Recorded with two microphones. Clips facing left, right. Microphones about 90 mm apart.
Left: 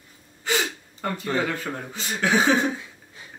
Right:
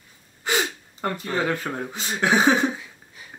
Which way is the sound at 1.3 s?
20° right (ahead or behind).